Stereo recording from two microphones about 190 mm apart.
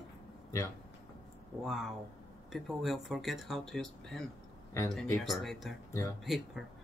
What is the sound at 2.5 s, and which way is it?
Speech, centre (ahead or behind).